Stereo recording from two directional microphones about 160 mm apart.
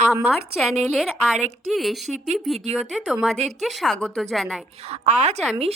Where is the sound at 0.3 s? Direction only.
Centre (ahead or behind).